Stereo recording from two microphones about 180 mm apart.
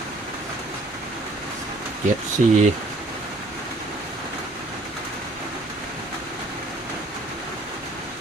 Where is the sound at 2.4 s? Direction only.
40° right (ahead or behind).